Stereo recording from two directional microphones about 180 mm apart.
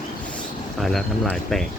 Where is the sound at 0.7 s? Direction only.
Centre (ahead or behind).